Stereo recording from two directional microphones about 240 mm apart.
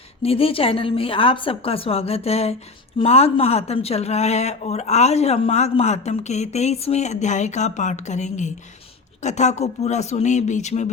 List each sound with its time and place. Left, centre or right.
0.2 s a woman's voice: left